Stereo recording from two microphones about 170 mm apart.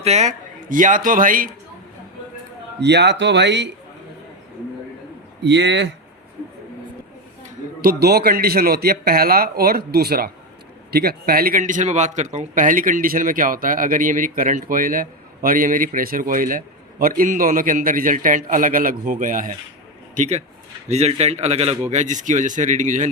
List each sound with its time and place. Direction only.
0.0 s speech: 40° right (ahead or behind)
2.8 s speech: 85° right
5.4 s speech: 90° right
7.8 s a man's voice: 65° right (ahead or behind); by 23.0 s 45° right (ahead or behind)